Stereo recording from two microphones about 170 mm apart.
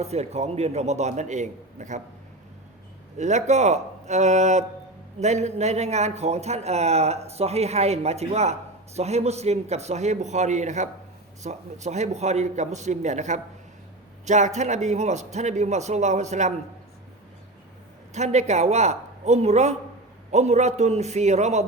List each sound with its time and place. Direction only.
0.0 s a man's voice: 40° right (ahead or behind)
3.2 s a man's voice: 45° right (ahead or behind)
18.1 s a man's voice: 40° right (ahead or behind)